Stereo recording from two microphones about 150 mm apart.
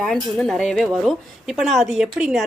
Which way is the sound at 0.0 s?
5° left (ahead or behind).